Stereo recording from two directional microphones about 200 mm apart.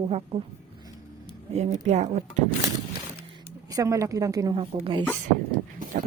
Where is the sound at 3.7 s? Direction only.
15° right (ahead or behind).